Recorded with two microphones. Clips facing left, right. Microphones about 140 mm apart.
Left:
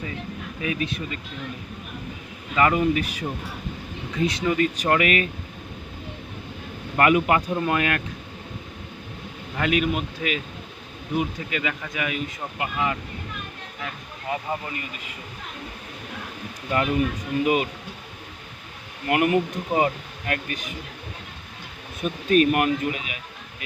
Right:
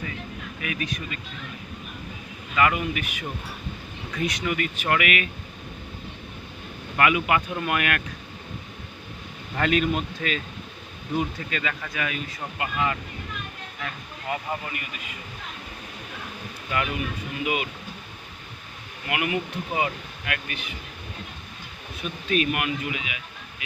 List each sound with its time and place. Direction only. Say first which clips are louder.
0.6 s speech: left 4 dB; 25° left (ahead or behind)
2.6 s speech: left 4 dB; 30° left (ahead or behind)
6.9 s speech: left 3 dB; 35° left (ahead or behind)
7.6 s speech: left 3 dB; 25° left (ahead or behind)
9.6 s speech: even; 10° left (ahead or behind)
13.8 s a sound: left 1 dB; 15° left (ahead or behind)
17.4 s speech: left 5 dB; 40° left (ahead or behind)
19.0 s speech: left 7 dB; 45° left (ahead or behind)
22.0 s speech: left 6 dB; 45° left (ahead or behind)